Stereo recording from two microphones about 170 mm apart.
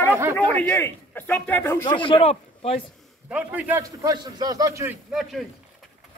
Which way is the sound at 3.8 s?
20° right (ahead or behind).